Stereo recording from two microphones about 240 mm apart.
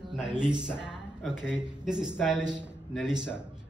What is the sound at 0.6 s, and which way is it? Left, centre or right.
A man's voice, centre.